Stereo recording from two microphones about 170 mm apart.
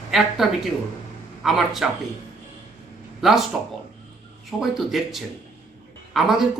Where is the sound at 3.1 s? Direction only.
Centre (ahead or behind).